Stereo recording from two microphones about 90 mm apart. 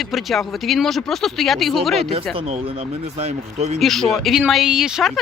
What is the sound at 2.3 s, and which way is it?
Speech, 90° right.